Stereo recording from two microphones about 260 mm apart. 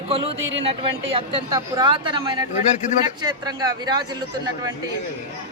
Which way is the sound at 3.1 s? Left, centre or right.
Centre.